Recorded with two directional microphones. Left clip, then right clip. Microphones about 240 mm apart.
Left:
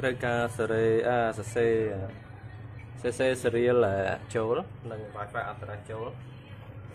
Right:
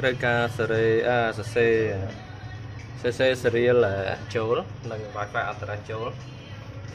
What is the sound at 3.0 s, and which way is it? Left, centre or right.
Speech, centre.